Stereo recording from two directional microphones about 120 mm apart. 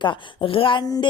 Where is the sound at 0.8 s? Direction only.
30° left (ahead or behind).